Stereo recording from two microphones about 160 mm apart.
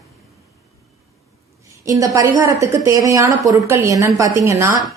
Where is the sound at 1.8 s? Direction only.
20° right (ahead or behind).